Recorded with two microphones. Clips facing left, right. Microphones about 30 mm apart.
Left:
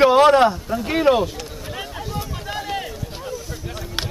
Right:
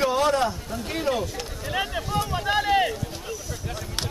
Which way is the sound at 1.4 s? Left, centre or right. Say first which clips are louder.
Right 3 dB; centre.